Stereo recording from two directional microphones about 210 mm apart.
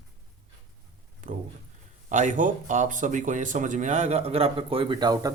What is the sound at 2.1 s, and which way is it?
Speech, 35° right (ahead or behind).